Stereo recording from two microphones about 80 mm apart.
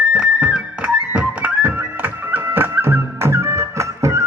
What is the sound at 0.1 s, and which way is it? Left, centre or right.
Music, centre.